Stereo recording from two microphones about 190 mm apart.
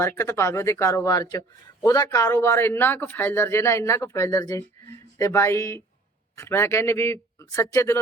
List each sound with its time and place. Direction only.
0.0 s a man's voice: 15° left (ahead or behind)